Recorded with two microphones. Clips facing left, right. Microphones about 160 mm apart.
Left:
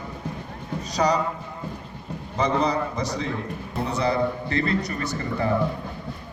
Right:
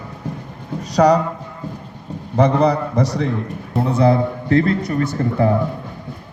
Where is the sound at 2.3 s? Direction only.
65° right (ahead or behind).